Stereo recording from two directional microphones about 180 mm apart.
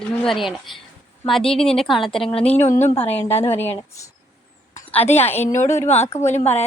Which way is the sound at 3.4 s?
10° left (ahead or behind).